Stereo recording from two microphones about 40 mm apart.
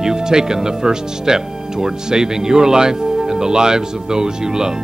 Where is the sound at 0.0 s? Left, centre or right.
Centre.